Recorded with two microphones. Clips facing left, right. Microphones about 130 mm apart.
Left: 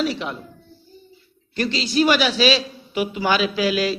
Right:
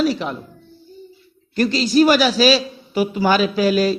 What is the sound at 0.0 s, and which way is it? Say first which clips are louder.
Speech: right 4 dB; 40° right (ahead or behind).